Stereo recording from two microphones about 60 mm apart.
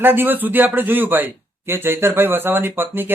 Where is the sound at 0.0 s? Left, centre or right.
Right.